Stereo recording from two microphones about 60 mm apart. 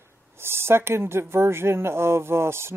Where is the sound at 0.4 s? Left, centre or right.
Right.